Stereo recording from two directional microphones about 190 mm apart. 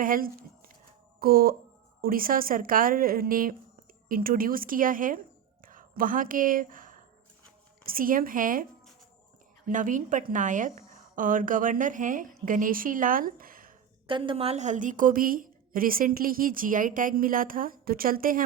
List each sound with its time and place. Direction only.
0.0 s a woman's voice: 50° right (ahead or behind)
9.6 s a woman's voice: 45° right (ahead or behind)
14.1 s a woman's voice: 25° right (ahead or behind); by 18.4 s 45° right (ahead or behind)